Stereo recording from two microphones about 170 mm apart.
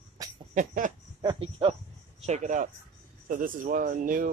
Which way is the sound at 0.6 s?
50° right (ahead or behind).